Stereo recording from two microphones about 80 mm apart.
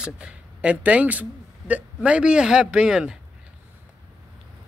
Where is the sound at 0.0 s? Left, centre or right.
Centre.